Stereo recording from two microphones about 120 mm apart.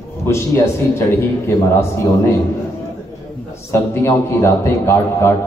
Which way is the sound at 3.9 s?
25° left (ahead or behind).